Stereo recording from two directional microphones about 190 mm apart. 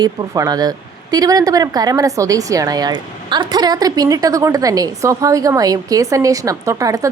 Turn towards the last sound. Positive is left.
turn(degrees=-15)  # may be behind; listen again after turning